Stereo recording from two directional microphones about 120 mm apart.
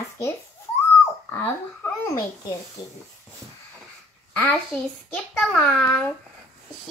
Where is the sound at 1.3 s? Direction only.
15° left (ahead or behind).